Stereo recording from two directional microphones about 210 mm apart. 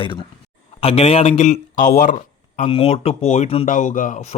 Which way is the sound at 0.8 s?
25° left (ahead or behind).